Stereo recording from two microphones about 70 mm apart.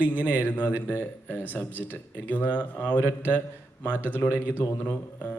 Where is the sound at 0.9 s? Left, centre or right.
Left.